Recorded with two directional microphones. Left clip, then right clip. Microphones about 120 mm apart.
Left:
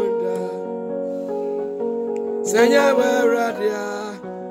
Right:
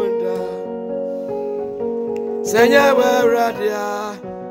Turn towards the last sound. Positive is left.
turn(degrees=10)  # may be behind; listen again after turning